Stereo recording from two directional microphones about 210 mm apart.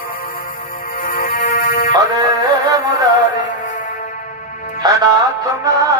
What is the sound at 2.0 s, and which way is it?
Music, 15° right (ahead or behind).